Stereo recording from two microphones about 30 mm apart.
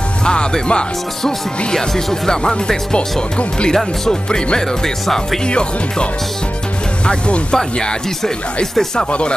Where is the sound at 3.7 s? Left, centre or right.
Centre.